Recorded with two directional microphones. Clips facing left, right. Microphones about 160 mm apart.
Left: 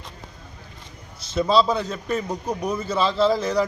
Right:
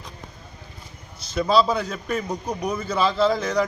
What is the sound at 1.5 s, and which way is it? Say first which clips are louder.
A man's voice: even; centre (ahead or behind).